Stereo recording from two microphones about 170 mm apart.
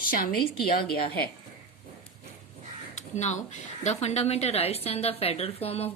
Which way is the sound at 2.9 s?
45° left (ahead or behind).